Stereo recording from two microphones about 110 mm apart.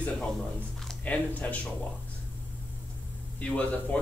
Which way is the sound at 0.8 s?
15° left (ahead or behind).